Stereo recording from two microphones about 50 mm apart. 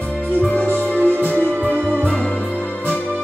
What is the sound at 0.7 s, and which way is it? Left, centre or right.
Music, right.